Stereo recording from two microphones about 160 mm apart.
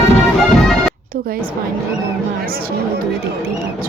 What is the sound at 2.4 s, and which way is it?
Speech, 70° right (ahead or behind).